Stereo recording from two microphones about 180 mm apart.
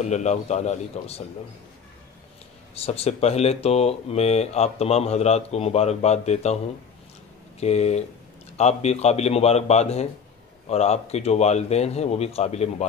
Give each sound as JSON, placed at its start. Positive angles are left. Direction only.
{"t": 0.0, "sound": "speech", "side_deg": 40}
{"t": 2.7, "sound": "speech", "side_deg": 35}
{"t": 7.6, "sound": "speech", "side_deg": 35}